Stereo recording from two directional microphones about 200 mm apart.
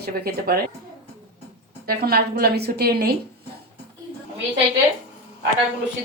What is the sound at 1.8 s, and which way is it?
A woman's voice, 50° right (ahead or behind).